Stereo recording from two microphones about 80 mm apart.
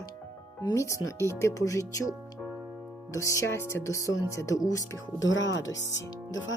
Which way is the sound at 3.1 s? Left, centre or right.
Left.